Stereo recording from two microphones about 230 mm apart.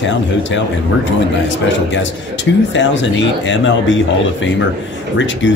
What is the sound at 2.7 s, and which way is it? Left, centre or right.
Speech, left.